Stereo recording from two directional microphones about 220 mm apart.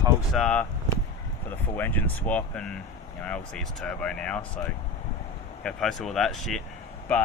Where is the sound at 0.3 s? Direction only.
5° left (ahead or behind).